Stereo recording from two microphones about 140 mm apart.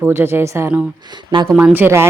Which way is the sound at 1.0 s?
30° right (ahead or behind).